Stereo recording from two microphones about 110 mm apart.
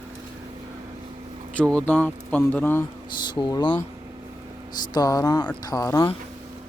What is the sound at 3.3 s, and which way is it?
Speech, 45° left (ahead or behind).